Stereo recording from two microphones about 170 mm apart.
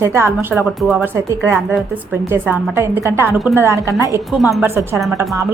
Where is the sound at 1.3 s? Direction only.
15° right (ahead or behind).